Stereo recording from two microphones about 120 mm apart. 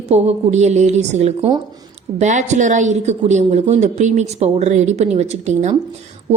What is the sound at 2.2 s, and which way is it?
A woman's voice, 80° right.